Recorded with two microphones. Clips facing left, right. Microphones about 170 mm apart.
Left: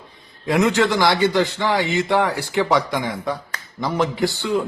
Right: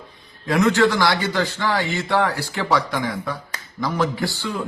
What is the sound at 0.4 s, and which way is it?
A man's voice, 20° left (ahead or behind).